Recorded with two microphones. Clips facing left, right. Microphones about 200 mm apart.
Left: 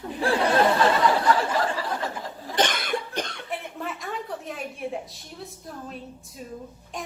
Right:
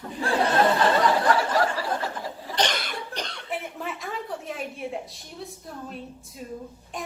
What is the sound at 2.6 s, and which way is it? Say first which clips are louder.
Cough: left 3 dB; 50° left (ahead or behind).